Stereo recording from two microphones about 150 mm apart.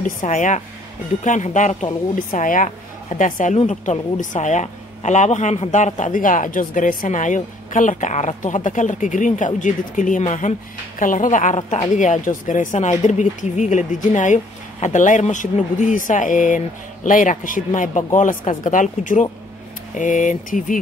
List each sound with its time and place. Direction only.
0.0 s a woman's voice: 60° left (ahead or behind)
3.5 s a woman's voice: 50° left (ahead or behind)